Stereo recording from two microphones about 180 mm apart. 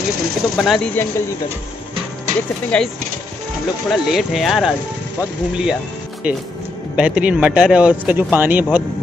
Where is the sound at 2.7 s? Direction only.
5° left (ahead or behind).